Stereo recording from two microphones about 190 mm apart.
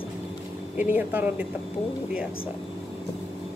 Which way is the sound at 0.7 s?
10° right (ahead or behind).